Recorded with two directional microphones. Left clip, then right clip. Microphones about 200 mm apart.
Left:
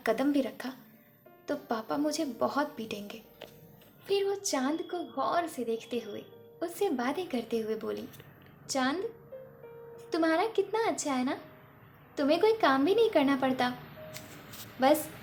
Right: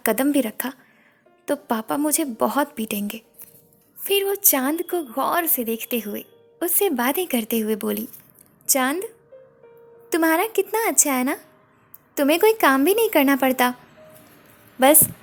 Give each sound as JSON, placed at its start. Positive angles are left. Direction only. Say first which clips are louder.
{"t": 0.0, "sound": "a woman's voice", "louder": "right 8 dB", "side_deg": -55}
{"t": 9.3, "sound": "music", "louder": "even", "side_deg": 0}
{"t": 10.2, "sound": "a woman's voice", "louder": "right 8 dB", "side_deg": -50}